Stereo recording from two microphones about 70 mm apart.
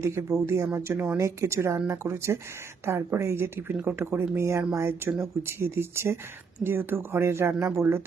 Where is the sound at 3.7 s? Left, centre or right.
Right.